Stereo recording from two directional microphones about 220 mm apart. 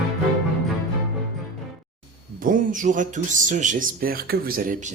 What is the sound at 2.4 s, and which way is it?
Speech, 35° right (ahead or behind).